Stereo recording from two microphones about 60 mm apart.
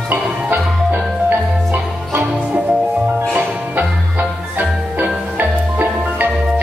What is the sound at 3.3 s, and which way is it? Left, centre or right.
Music, right.